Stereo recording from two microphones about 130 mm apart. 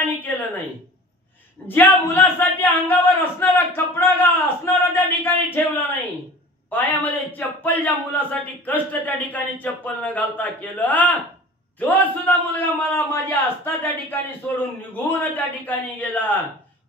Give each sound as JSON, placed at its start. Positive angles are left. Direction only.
{"t": 0.0, "sound": "a sound", "side_deg": 15}
{"t": 1.7, "sound": "a man's voice", "side_deg": 15}
{"t": 6.7, "sound": "a man's voice", "side_deg": 15}